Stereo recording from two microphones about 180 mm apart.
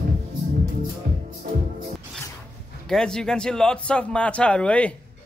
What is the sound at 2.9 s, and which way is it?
A man's voice, 5° left (ahead or behind).